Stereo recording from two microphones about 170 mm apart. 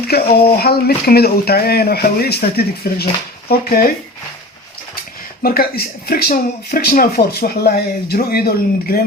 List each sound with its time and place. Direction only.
0.1 s speech: 65° left (ahead or behind)
5.4 s speech: 65° left (ahead or behind)